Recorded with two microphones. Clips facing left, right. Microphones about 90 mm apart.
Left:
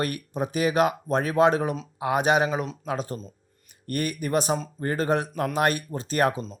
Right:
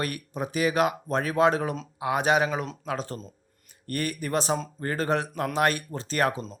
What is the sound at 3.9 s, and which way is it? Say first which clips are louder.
A man's voice: left 2 dB; 20° left (ahead or behind).